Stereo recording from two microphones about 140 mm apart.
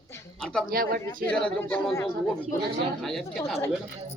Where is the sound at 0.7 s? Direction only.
90° right.